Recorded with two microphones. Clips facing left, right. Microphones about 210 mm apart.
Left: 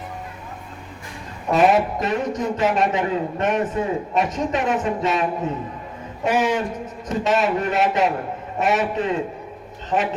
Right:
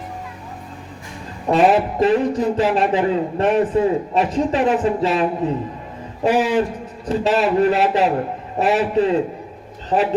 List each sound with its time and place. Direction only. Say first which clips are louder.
1.5 s speech: right 2 dB; 30° right (ahead or behind)